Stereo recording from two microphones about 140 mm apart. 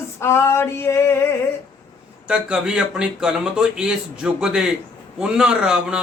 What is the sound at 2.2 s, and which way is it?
A man's voice, 5° right (ahead or behind).